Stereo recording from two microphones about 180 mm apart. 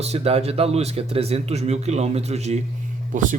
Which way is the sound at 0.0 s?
35° right (ahead or behind).